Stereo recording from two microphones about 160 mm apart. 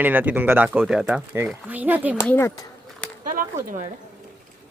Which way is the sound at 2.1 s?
15° left (ahead or behind).